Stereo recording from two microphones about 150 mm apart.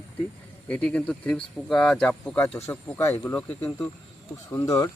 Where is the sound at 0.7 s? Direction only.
5° left (ahead or behind).